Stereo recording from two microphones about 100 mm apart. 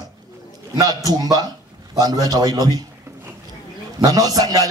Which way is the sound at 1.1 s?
40° right (ahead or behind).